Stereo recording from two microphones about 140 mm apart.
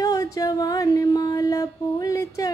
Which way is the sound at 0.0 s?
25° left (ahead or behind).